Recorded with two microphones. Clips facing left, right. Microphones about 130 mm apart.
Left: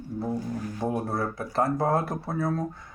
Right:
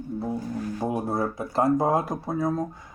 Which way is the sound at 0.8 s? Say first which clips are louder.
Right 1 dB; 15° right (ahead or behind).